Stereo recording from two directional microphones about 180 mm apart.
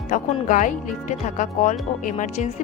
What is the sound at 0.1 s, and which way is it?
Speech, 45° left (ahead or behind).